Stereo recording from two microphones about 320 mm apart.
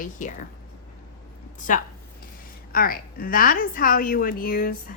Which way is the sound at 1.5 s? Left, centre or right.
Left.